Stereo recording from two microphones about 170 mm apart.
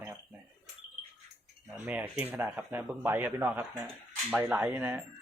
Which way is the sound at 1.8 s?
10° right (ahead or behind).